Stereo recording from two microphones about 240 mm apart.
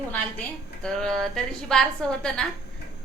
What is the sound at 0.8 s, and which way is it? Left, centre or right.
A woman's voice, centre.